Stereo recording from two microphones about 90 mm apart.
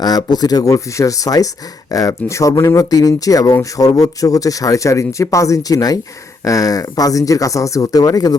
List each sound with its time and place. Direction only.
0.0 s speech: 50° left (ahead or behind)